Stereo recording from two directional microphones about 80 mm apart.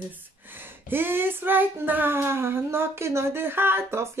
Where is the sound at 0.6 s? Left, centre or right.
Right.